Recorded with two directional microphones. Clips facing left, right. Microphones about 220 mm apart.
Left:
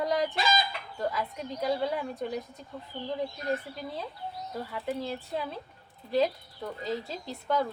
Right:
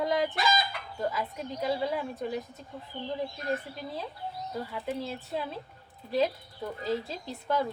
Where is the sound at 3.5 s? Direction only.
Centre (ahead or behind).